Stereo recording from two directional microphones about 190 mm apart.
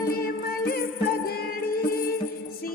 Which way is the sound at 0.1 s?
50° left (ahead or behind).